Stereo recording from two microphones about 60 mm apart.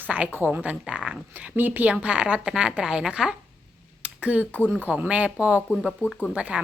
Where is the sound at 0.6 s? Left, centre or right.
Centre.